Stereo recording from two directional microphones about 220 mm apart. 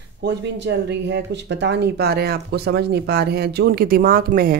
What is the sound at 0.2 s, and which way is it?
Speech, 50° right (ahead or behind).